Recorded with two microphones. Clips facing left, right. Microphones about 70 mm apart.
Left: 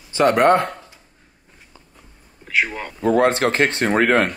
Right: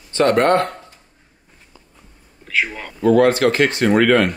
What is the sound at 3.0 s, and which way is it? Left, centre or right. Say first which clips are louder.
Speech: right 3 dB; left.